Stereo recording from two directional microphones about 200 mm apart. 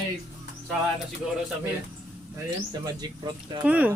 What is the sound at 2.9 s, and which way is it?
Speech, 20° right (ahead or behind).